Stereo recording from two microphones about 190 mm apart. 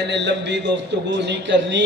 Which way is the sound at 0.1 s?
65° right (ahead or behind).